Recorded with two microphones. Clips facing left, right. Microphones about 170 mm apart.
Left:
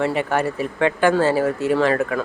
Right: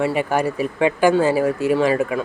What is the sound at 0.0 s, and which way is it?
Speech, 10° right (ahead or behind).